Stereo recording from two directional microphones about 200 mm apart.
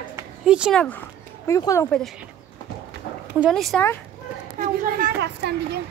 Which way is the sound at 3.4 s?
Centre (ahead or behind).